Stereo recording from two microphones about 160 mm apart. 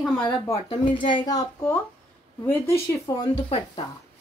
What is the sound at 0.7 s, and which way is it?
Speech, 30° left (ahead or behind).